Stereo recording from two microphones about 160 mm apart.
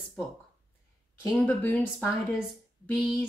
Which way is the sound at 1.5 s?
10° left (ahead or behind).